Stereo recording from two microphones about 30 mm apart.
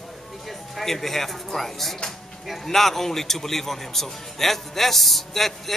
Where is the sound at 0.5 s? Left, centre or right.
Centre.